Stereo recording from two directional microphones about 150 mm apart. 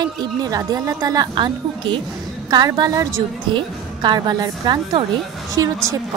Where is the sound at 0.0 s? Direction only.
25° right (ahead or behind).